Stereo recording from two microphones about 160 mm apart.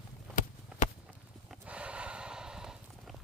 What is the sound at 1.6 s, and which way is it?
Snort, 5° right (ahead or behind).